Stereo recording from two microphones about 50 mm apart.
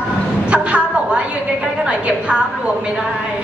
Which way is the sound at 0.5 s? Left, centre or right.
Right.